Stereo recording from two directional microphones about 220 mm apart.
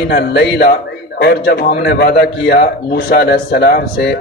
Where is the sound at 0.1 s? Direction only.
45° left (ahead or behind).